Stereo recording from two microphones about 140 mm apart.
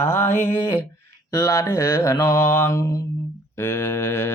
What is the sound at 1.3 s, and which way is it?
Mantra, 25° left (ahead or behind).